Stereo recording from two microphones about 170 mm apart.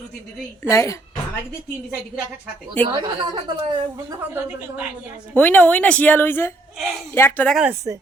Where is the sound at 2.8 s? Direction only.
25° right (ahead or behind).